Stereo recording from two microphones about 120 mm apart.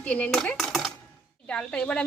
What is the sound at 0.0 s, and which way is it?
Dishes, 10° left (ahead or behind).